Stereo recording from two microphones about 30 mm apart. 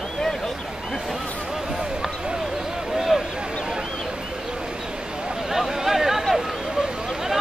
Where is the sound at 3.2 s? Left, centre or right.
Right.